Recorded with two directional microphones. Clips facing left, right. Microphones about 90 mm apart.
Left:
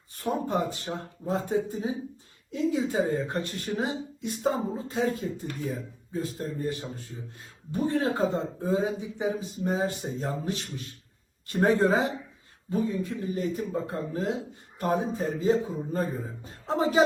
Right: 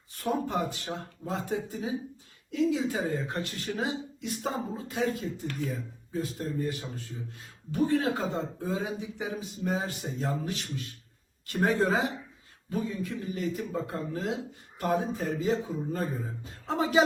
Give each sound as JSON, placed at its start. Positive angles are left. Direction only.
{"t": 0.2, "sound": "a man's voice", "side_deg": 30}
{"t": 0.9, "sound": "speech", "side_deg": 0}
{"t": 1.3, "sound": "a man's voice", "side_deg": 30}